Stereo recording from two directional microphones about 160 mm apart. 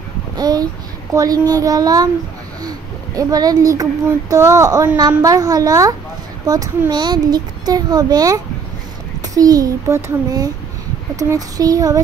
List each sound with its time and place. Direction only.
0.4 s speech: 25° right (ahead or behind)
3.2 s speech: 20° right (ahead or behind)